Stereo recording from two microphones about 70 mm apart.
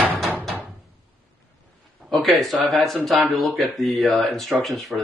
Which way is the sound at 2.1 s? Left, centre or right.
Centre.